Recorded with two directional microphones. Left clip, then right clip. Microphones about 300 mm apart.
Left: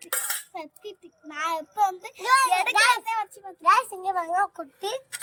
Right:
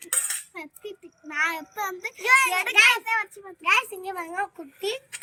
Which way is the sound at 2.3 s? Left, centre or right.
Centre.